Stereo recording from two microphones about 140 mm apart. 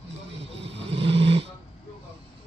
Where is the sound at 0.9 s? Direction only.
45° right (ahead or behind).